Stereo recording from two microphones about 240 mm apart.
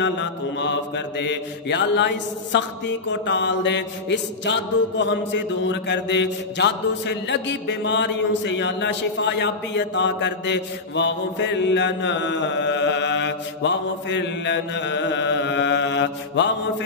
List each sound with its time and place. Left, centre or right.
0.0 s mantra: left